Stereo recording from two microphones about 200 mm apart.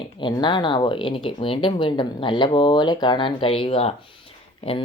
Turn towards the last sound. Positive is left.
turn(degrees=30)  # may be behind; listen again after turning